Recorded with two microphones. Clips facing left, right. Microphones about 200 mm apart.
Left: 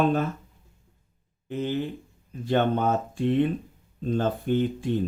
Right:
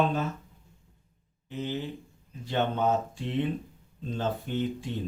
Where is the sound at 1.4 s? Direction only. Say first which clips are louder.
Left 5 dB; 55° left (ahead or behind).